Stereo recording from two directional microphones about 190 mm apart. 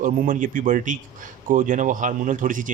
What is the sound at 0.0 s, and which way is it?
A man's voice, 45° right (ahead or behind).